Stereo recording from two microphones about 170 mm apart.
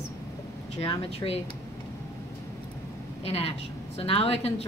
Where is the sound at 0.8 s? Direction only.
30° left (ahead or behind).